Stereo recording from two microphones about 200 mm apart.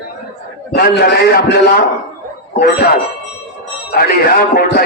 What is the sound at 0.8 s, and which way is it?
Speech, 50° left (ahead or behind).